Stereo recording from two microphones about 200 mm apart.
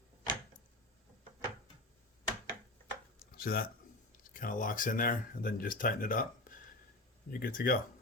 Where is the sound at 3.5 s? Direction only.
50° left (ahead or behind).